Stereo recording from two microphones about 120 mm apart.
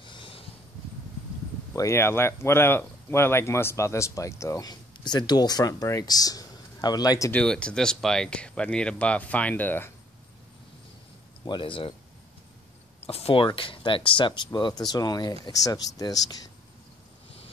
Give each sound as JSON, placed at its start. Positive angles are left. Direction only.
{"t": 0.0, "sound": "a sound", "side_deg": 45}
{"t": 1.8, "sound": "speech", "side_deg": 20}
{"t": 7.3, "sound": "speech", "side_deg": 10}
{"t": 11.4, "sound": "speech", "side_deg": 40}
{"t": 13.0, "sound": "speech", "side_deg": 55}